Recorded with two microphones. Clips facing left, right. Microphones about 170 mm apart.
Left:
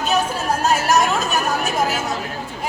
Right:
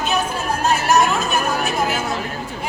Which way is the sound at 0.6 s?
40° left (ahead or behind).